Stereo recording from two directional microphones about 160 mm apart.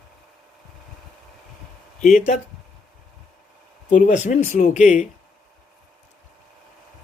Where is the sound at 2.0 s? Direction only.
55° left (ahead or behind).